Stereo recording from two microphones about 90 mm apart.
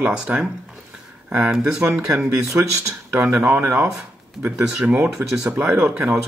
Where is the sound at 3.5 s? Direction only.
25° right (ahead or behind).